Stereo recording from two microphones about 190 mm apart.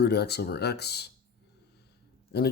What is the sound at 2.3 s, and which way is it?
Speech, 60° left (ahead or behind).